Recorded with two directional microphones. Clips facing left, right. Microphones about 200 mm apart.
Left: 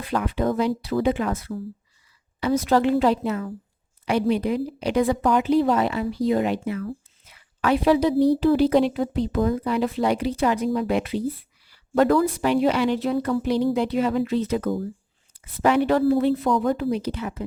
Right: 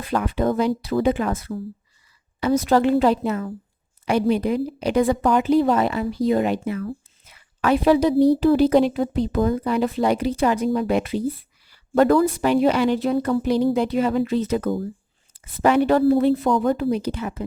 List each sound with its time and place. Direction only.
0.0 s speech: 45° right (ahead or behind)
16.4 s speech: 30° right (ahead or behind)
16.9 s speech: 45° right (ahead or behind)